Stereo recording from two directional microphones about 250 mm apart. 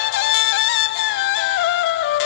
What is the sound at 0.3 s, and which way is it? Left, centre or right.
Music, left.